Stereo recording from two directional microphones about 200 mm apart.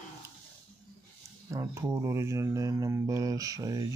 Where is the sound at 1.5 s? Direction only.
15° right (ahead or behind).